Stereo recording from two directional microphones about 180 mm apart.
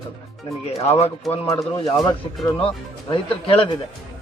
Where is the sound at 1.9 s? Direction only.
20° left (ahead or behind).